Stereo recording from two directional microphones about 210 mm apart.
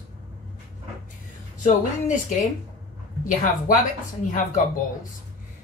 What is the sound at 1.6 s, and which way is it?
Speech, 35° left (ahead or behind).